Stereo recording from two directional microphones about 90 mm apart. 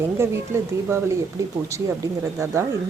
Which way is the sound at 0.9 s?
30° right (ahead or behind).